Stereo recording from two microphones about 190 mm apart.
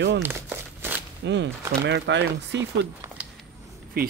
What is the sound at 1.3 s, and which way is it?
Speech, 65° right (ahead or behind).